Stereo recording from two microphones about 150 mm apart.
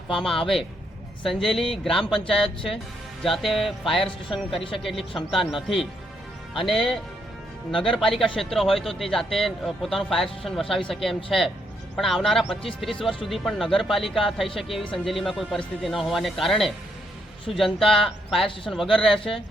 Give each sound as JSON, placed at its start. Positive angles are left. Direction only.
{"t": 0.1, "sound": "a man's voice", "side_deg": 5}